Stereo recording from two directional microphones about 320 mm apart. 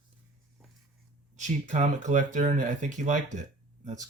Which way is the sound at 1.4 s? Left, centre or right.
Right.